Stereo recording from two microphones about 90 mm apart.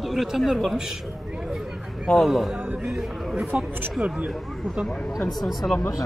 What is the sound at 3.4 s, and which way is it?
Speech, 15° right (ahead or behind).